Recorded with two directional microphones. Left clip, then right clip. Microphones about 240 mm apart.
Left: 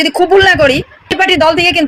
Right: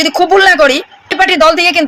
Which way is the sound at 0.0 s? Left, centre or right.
Centre.